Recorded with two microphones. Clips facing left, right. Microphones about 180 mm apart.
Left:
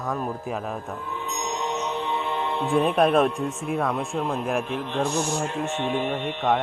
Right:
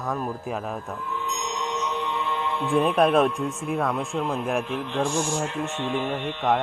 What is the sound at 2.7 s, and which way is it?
Speech, centre (ahead or behind).